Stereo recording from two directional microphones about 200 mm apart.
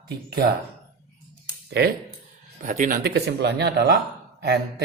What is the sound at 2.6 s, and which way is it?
Speech, 40° right (ahead or behind).